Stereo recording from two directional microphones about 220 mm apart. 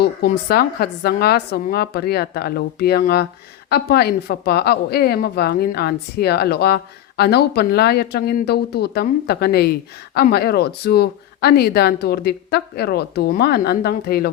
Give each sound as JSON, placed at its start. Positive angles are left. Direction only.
{"t": 0.0, "sound": "speech", "side_deg": 45}